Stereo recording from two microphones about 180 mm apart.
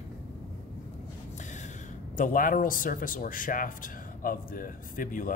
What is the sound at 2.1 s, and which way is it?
Speech, 50° left (ahead or behind).